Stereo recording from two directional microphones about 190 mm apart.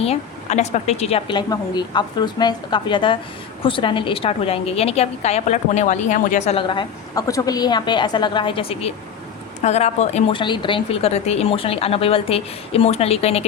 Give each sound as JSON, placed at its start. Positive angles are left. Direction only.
{"t": 0.0, "sound": "a woman's voice", "side_deg": 35}